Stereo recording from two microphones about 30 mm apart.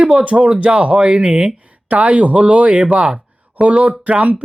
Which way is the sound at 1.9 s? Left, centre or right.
Right.